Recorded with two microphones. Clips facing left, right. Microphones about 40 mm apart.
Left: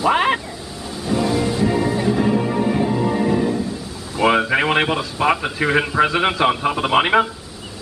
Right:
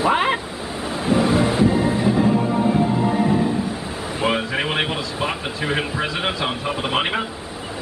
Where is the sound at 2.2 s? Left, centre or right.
Centre.